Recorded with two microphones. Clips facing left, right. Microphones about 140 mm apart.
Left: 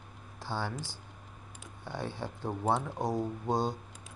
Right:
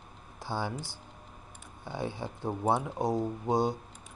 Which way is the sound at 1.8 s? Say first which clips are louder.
Right 2 dB; 15° right (ahead or behind).